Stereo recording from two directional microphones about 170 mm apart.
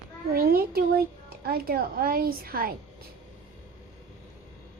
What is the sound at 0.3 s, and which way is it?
A child's voice, 60° right (ahead or behind).